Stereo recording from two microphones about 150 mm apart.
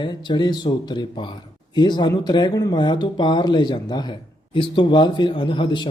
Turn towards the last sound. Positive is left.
turn(degrees=35)  # may be behind; listen again after turning